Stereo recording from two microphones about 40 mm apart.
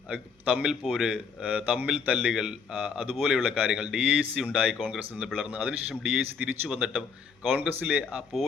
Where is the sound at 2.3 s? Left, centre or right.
Centre.